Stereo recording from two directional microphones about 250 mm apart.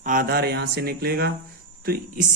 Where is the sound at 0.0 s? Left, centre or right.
Right.